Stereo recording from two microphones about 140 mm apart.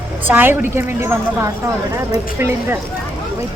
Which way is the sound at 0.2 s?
15° right (ahead or behind).